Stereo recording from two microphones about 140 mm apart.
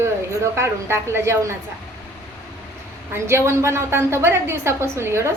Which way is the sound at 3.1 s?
20° right (ahead or behind).